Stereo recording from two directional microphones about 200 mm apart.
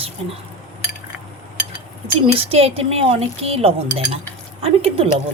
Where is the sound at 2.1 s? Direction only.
30° right (ahead or behind).